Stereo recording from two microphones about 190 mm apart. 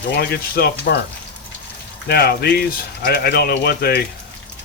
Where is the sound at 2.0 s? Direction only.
55° left (ahead or behind).